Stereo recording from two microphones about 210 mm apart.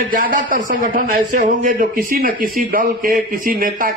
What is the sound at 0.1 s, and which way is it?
A man's voice, 40° right (ahead or behind).